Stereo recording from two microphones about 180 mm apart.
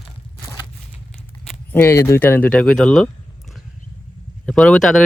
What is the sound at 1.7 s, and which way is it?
Speech, 15° left (ahead or behind).